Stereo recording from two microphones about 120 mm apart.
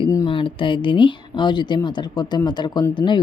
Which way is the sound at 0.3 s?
45° left (ahead or behind).